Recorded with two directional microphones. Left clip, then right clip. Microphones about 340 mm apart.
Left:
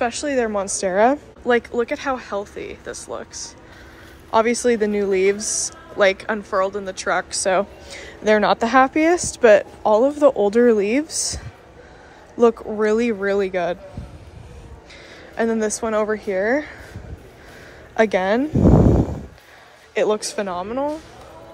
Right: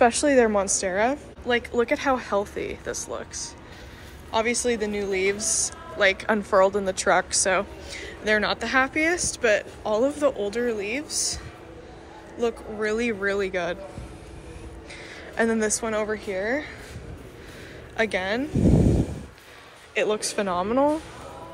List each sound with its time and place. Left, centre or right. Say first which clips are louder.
0.0 s speech: right 2 dB; centre
4.3 s speech: left 7 dB; left
15.3 s speech: left 3 dB; centre
17.9 s speech: left 7 dB; centre
19.9 s speech: left 5 dB; centre